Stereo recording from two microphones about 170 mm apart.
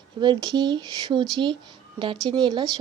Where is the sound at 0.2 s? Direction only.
25° right (ahead or behind).